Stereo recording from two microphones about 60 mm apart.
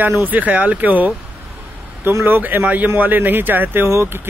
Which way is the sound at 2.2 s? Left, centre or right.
Right.